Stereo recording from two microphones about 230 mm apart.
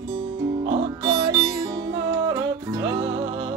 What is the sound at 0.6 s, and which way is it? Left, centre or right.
Music, right.